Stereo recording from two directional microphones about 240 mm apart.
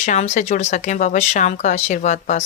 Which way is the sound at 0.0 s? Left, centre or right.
Left.